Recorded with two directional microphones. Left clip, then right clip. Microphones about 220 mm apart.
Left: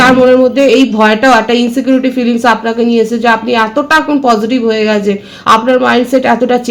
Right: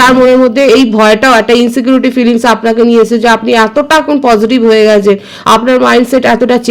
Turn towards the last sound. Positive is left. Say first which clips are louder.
# right 2 dB
turn(degrees=-50)  # may be behind; listen again after turning